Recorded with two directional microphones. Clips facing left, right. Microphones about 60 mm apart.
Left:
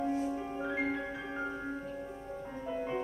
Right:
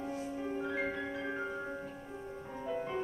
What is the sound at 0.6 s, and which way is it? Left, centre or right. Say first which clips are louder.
Music: left 2 dB; centre.